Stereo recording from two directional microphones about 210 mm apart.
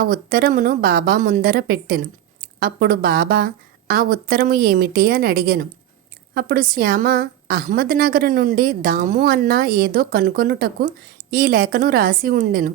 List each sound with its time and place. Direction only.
0.0 s a woman's voice: 45° right (ahead or behind)